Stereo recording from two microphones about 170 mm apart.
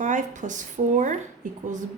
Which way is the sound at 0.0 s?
45° right (ahead or behind).